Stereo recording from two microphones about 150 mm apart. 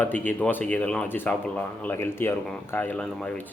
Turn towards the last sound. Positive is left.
turn(degrees=5)  # may be behind; listen again after turning